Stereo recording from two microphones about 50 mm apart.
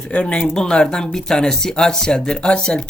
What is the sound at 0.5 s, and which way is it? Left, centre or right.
Speech, centre.